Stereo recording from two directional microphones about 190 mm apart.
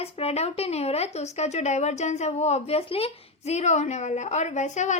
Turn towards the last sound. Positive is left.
turn(degrees=40)  # may be behind; listen again after turning